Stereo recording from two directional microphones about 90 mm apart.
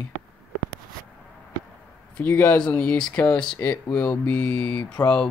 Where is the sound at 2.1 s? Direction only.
15° left (ahead or behind).